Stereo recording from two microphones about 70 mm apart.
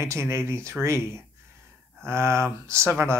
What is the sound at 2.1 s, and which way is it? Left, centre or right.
Speech, right.